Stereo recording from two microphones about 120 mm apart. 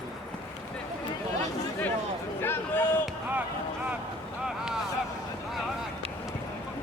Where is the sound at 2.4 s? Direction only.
15° left (ahead or behind).